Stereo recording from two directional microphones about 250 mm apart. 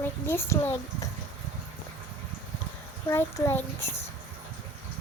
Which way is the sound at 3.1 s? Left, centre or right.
Centre.